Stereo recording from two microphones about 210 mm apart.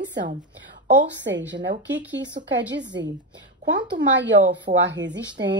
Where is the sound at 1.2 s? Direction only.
55° right (ahead or behind).